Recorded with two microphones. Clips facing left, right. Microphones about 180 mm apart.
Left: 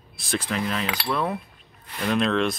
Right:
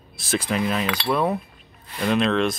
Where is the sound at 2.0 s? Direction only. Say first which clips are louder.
Right 2 dB; centre (ahead or behind).